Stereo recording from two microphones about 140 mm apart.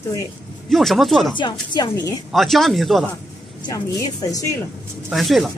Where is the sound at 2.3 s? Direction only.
Centre (ahead or behind).